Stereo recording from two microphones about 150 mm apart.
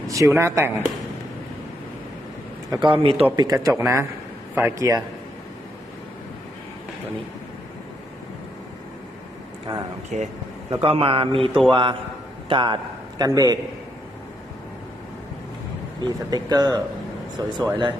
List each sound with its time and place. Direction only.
0.1 s speech: 20° right (ahead or behind)
2.6 s a man's voice: 30° right (ahead or behind)
3.3 s speech: 25° right (ahead or behind)
10.1 s speech: 50° right (ahead or behind)
10.7 s a man's voice: 40° right (ahead or behind); by 13.6 s 25° right (ahead or behind)
16.0 s speech: 25° right (ahead or behind)